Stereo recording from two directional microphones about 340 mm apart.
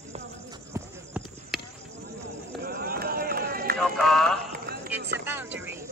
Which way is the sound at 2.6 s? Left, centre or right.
Right.